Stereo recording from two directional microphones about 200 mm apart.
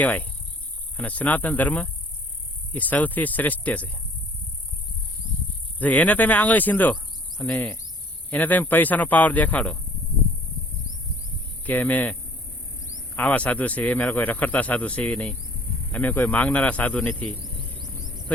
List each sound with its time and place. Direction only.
0.0 s speech: 5° left (ahead or behind)
5.8 s speech: 5° left (ahead or behind)
11.6 s speech: 10° left (ahead or behind)
13.1 s speech: 5° left (ahead or behind)
17.4 s cricket: 45° right (ahead or behind)
18.0 s a sound: 40° right (ahead or behind)